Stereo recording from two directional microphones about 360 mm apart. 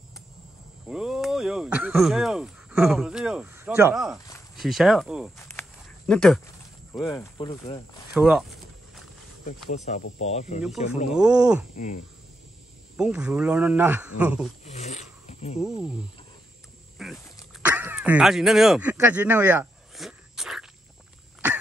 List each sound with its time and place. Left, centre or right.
0.8 s speech: centre
8.1 s a sound: centre
9.9 s speech: centre
11.1 s speech: centre
11.7 s speech: centre
12.9 s speech: centre
14.6 s speech: centre
17.0 s speech: centre